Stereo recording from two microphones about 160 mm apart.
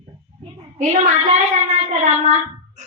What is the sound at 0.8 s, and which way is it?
Speech, 45° right (ahead or behind).